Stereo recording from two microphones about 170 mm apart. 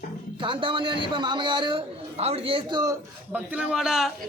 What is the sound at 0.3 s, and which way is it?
A man's voice, 30° right (ahead or behind).